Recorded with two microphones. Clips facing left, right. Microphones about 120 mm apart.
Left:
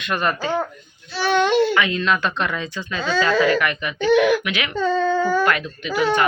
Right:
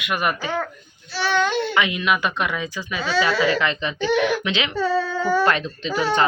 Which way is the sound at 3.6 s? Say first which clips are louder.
Left 2 dB; 25° right (ahead or behind).